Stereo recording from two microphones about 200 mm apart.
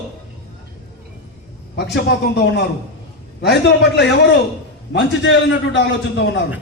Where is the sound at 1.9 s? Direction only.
55° left (ahead or behind).